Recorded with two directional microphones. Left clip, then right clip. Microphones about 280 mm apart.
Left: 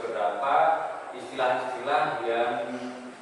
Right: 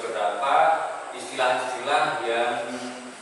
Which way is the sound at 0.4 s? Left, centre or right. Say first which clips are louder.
Right 3 dB; centre.